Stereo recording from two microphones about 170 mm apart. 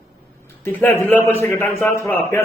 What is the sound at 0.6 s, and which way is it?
A man's voice, 10° left (ahead or behind).